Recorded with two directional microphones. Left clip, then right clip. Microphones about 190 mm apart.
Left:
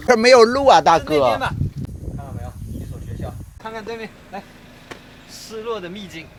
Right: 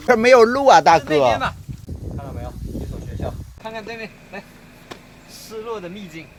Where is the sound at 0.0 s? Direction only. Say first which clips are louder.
Left 1 dB; centre (ahead or behind).